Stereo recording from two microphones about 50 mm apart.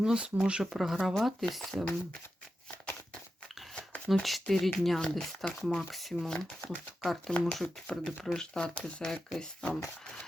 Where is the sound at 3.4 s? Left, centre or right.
Centre.